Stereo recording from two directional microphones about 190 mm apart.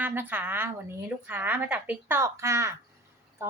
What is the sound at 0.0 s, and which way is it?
A woman's voice, 10° right (ahead or behind).